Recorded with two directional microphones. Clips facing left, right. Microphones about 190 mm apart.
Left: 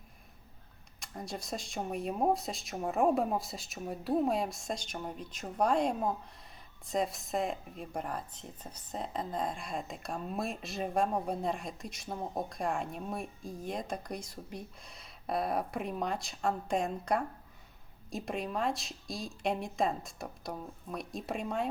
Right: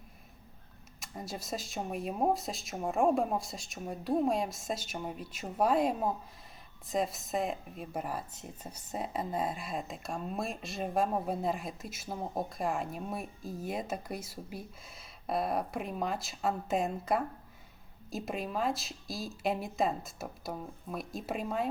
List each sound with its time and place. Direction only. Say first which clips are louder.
0.9 s speech: even; centre (ahead or behind)